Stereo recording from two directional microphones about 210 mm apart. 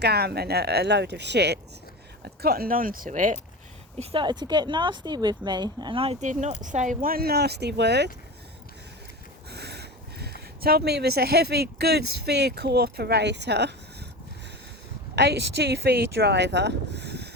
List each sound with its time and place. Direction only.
0.0 s speech: 50° right (ahead or behind)
3.9 s speech: 25° right (ahead or behind); by 8.1 s 55° right (ahead or behind)
9.5 s speech: 50° right (ahead or behind)
15.1 s speech: 50° right (ahead or behind)